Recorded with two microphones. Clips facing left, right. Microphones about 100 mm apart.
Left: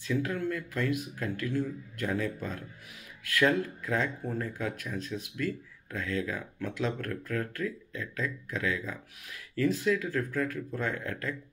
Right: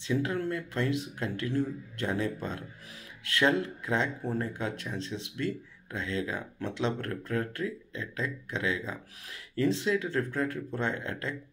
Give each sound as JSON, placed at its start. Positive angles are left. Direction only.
{"t": 0.0, "sound": "speech", "side_deg": -25}